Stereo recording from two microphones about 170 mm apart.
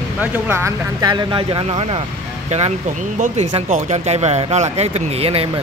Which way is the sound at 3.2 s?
40° right (ahead or behind).